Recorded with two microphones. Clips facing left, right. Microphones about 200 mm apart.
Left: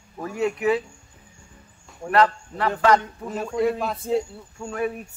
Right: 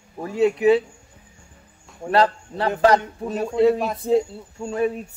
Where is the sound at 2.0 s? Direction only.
30° right (ahead or behind).